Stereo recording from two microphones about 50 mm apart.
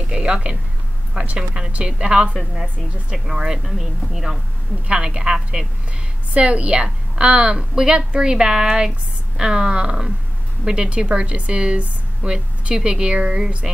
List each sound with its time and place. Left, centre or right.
0.1 s speech: centre
3.3 s a woman's voice: centre
4.8 s a woman's voice: centre